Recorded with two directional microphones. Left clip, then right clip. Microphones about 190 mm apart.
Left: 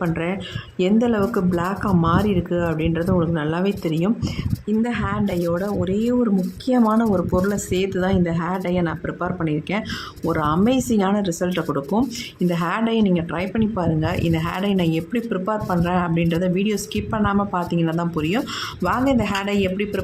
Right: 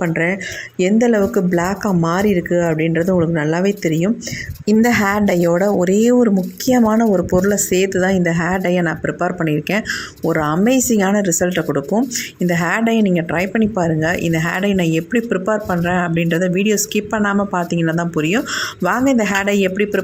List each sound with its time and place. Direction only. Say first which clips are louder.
0.0 s speech: right 6 dB; 15° right (ahead or behind)
4.6 s speech: right 10 dB; 30° right (ahead or behind)